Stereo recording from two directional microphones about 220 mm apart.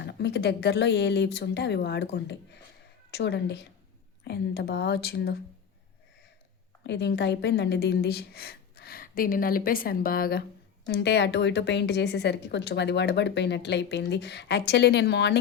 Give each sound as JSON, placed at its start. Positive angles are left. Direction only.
{"t": 0.0, "sound": "a woman's voice", "side_deg": 50}
{"t": 6.8, "sound": "a woman's voice", "side_deg": 50}